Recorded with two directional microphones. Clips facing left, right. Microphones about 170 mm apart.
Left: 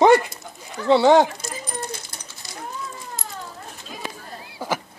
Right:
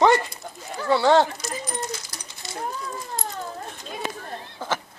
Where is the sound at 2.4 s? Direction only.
25° right (ahead or behind).